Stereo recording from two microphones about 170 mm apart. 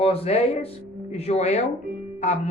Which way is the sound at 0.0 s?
35° left (ahead or behind).